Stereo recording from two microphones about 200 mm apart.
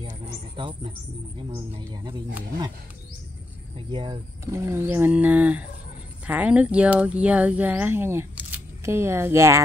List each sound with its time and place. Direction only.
0.6 s speech: 25° right (ahead or behind)
3.9 s speech: 20° right (ahead or behind)